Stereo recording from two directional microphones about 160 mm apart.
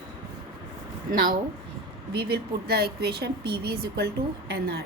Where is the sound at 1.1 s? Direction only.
65° right (ahead or behind).